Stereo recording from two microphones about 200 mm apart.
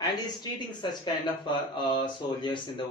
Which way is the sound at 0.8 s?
20° left (ahead or behind).